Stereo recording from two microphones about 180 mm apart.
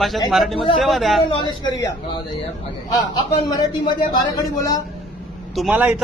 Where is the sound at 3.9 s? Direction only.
25° left (ahead or behind).